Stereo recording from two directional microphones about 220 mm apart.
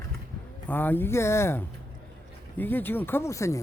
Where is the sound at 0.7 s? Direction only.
10° left (ahead or behind).